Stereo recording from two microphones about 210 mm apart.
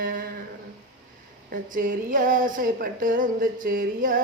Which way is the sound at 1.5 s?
40° right (ahead or behind).